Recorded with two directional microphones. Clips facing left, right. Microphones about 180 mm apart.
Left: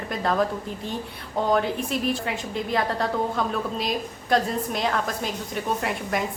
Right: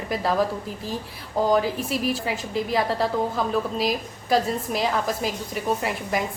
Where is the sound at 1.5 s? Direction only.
5° right (ahead or behind).